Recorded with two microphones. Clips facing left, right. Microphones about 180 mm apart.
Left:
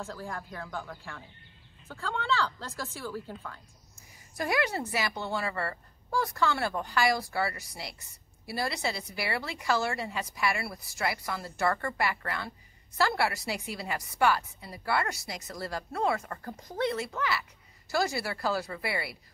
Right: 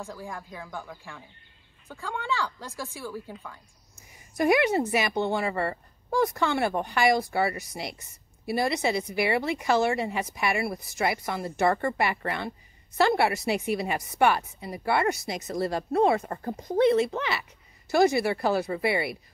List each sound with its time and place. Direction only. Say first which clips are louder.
0.0 s a woman's voice: right 1 dB; 15° right (ahead or behind)